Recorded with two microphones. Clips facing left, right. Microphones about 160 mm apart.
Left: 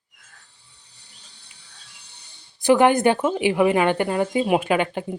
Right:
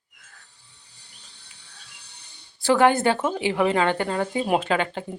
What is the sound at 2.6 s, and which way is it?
A woman's voice, 15° left (ahead or behind).